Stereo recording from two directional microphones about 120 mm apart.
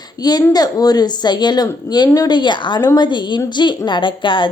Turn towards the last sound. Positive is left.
turn(degrees=45)  # may be behind; listen again after turning